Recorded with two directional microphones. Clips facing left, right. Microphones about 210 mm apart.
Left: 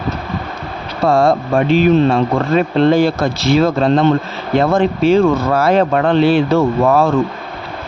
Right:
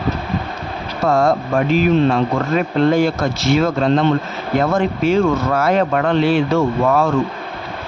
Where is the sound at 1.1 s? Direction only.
30° left (ahead or behind).